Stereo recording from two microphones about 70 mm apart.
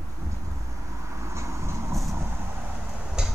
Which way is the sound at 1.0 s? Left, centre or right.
Right.